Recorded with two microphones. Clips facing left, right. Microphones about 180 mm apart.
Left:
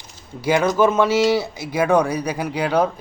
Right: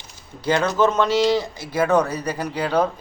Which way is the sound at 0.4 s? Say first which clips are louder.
Left 2 dB; 10° left (ahead or behind).